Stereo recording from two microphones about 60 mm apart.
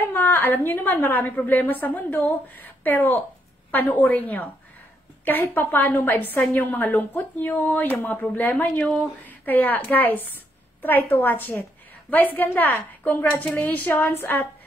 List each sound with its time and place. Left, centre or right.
0.0 s a woman's voice: left